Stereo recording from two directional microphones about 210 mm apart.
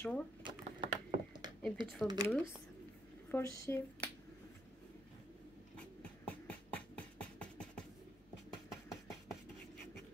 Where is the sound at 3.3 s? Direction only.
10° left (ahead or behind).